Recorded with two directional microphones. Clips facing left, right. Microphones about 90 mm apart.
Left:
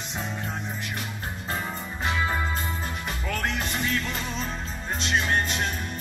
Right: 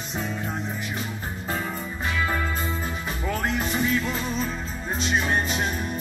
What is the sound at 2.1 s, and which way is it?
Music, 20° left (ahead or behind).